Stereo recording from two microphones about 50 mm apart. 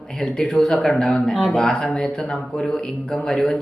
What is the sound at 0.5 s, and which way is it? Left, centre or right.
Speech, centre.